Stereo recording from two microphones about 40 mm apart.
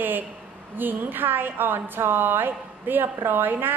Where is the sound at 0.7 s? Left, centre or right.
Right.